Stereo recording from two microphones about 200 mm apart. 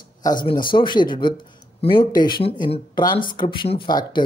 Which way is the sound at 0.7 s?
25° left (ahead or behind).